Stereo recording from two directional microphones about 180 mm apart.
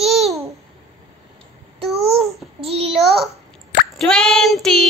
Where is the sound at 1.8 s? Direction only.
35° right (ahead or behind).